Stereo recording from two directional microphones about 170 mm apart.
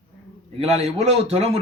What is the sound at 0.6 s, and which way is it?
Speech, 40° right (ahead or behind).